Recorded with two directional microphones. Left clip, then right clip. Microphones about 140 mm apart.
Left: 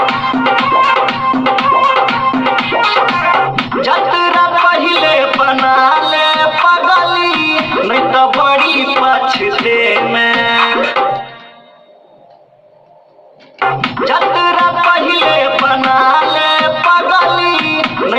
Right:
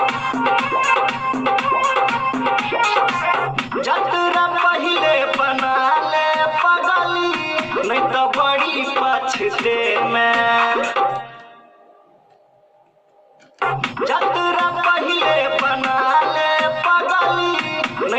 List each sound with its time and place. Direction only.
0.0 s music: 25° left (ahead or behind)
13.6 s music: 25° left (ahead or behind)